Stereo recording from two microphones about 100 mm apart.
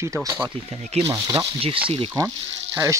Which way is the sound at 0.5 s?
90° right.